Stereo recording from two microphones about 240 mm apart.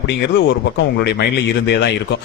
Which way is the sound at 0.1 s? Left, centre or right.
Left.